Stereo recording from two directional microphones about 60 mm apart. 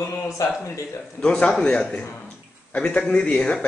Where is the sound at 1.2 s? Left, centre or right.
Centre.